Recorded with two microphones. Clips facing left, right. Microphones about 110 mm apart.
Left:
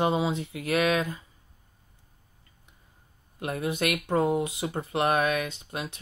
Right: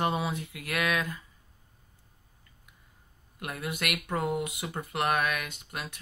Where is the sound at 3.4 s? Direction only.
30° left (ahead or behind).